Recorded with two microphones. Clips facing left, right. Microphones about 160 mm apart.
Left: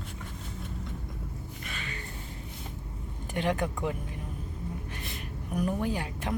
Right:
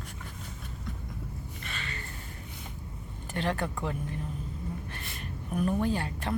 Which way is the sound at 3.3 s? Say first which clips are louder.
Left 2 dB; 15° left (ahead or behind).